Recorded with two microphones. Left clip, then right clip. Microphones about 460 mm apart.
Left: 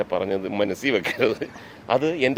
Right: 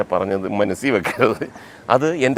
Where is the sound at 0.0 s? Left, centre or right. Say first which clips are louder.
Right 4 dB; right.